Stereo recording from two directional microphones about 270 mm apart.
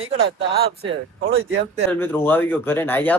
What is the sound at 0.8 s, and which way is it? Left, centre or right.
Speech, right.